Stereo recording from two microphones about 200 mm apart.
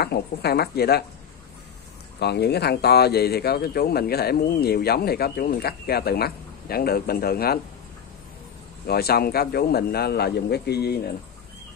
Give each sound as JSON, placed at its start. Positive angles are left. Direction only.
{"t": 0.0, "sound": "speech", "side_deg": 55}
{"t": 2.1, "sound": "speech", "side_deg": 55}
{"t": 8.8, "sound": "speech", "side_deg": 50}